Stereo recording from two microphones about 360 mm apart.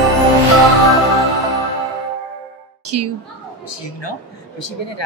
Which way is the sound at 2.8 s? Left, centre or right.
Right.